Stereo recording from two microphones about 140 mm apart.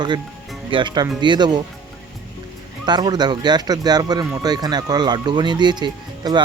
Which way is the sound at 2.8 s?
30° right (ahead or behind).